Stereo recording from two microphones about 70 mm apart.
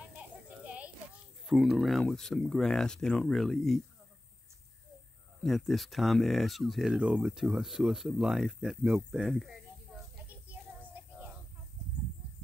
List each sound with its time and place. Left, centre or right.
0.7 s children playing: centre
1.5 s speech: centre
5.4 s speech: centre
7.0 s speech: centre
10.1 s child singing: right